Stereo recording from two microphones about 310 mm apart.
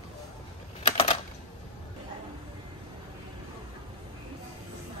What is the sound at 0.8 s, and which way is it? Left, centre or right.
Typing, centre.